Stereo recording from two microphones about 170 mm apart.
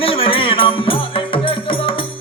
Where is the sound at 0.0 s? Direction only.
35° left (ahead or behind).